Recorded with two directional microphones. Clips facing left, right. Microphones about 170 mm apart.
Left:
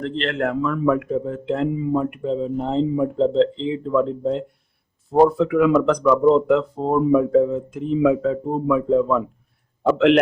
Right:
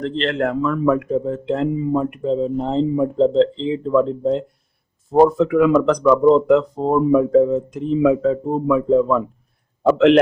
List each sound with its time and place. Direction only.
0.0 s speech: 35° right (ahead or behind)